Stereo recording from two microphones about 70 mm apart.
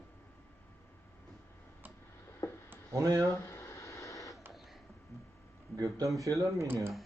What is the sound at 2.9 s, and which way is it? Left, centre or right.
Speech, right.